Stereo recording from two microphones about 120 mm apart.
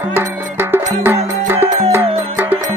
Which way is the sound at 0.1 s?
20° right (ahead or behind).